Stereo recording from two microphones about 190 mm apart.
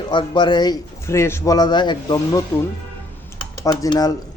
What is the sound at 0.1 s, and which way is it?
A man's voice, 25° left (ahead or behind).